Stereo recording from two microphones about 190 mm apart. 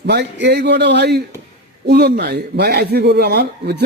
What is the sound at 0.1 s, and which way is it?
A man's voice, 60° right (ahead or behind).